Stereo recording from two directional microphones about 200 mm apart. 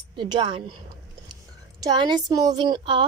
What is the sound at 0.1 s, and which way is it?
A woman's voice, 25° right (ahead or behind).